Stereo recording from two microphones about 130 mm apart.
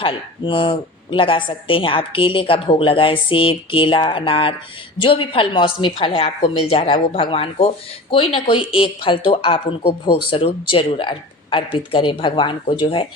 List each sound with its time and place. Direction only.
0.0 s a woman's voice: 40° left (ahead or behind)